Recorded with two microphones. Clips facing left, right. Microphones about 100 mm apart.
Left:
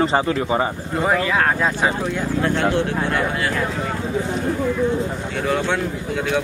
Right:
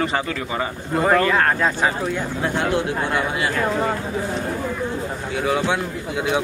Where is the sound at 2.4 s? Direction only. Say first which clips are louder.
Left 2 dB; 10° right (ahead or behind).